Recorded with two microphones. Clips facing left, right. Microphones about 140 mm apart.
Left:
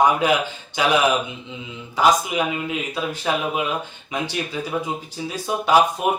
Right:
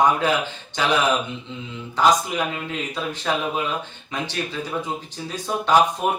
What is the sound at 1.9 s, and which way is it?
Speech, 10° left (ahead or behind).